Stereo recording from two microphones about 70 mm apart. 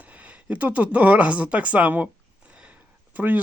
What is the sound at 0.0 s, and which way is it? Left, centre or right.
Speech, right.